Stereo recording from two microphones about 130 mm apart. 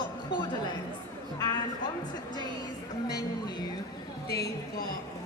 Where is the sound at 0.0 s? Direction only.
35° left (ahead or behind).